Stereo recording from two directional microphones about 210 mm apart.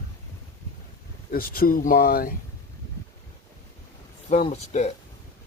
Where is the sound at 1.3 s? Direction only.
45° left (ahead or behind).